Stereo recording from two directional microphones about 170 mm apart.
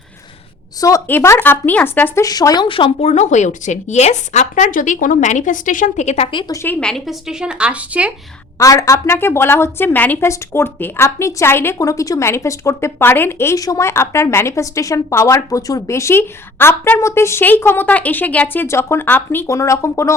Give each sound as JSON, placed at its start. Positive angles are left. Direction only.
{"t": 0.8, "sound": "speech", "side_deg": 20}
{"t": 6.3, "sound": "speech", "side_deg": 15}
{"t": 8.5, "sound": "a woman's voice", "side_deg": 20}